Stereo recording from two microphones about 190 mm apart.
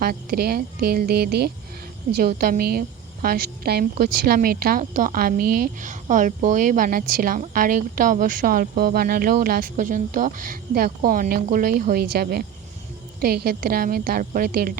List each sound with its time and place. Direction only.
0.0 s speech: 55° right (ahead or behind)